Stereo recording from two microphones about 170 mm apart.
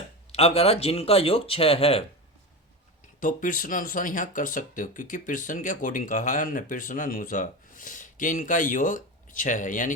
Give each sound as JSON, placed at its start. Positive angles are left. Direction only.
{"t": 0.3, "sound": "speech", "side_deg": 35}
{"t": 3.2, "sound": "speech", "side_deg": 50}